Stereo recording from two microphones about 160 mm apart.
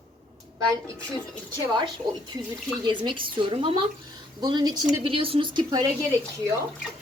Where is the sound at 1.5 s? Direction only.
30° right (ahead or behind).